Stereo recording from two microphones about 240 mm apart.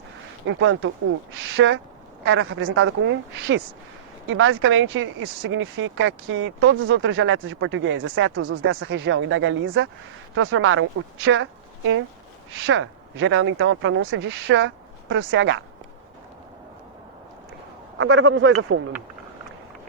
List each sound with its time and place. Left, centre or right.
0.4 s speech: right
12.6 s speech: right
17.9 s speech: right